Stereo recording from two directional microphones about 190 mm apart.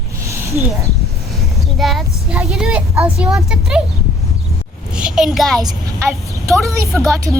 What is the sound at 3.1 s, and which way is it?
Speech, 5° right (ahead or behind).